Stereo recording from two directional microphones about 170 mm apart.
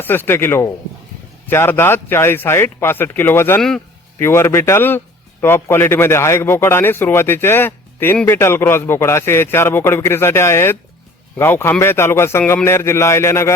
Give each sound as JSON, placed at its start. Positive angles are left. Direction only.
{"t": 0.0, "sound": "a man's voice", "side_deg": 10}